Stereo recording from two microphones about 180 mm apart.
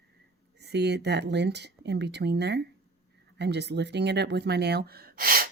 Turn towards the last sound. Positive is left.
turn(degrees=-55)  # may be behind; listen again after turning